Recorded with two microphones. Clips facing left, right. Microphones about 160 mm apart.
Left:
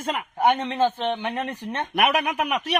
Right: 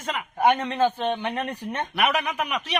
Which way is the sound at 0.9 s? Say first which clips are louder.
Even; 15° right (ahead or behind).